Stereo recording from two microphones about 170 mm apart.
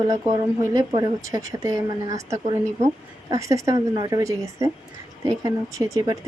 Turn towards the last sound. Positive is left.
turn(degrees=-20)  # may be behind; listen again after turning